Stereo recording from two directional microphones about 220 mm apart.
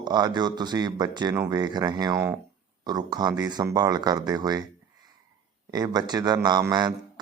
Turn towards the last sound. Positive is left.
turn(degrees=-20)  # may be behind; listen again after turning